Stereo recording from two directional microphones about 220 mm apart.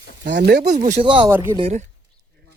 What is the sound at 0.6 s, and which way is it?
Speech, 35° right (ahead or behind).